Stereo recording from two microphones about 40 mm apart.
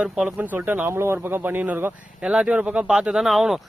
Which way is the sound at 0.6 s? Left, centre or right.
Right.